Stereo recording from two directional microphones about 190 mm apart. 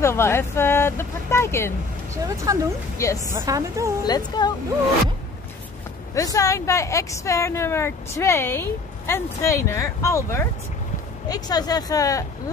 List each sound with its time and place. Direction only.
0.0 s speech: 15° left (ahead or behind)
2.2 s a woman's voice: 15° right (ahead or behind)
3.0 s speech: 15° left (ahead or behind)
3.3 s a woman's voice: 15° right (ahead or behind)
4.0 s speech: 20° left (ahead or behind)
6.1 s speech: 15° left (ahead or behind)